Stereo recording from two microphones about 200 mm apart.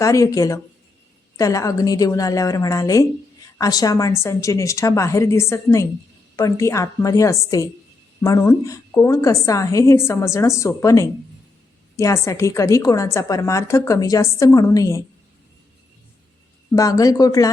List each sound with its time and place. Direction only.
0.0 s a woman's voice: 15° left (ahead or behind)
16.7 s a woman's voice: 15° left (ahead or behind)